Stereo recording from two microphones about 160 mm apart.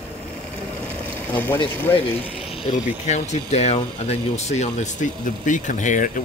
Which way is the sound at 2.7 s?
45° left (ahead or behind).